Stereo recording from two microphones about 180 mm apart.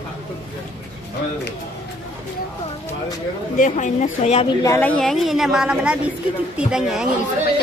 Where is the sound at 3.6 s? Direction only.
45° left (ahead or behind).